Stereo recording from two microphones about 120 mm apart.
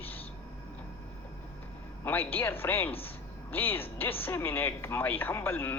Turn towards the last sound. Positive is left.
turn(degrees=15)  # may be behind; listen again after turning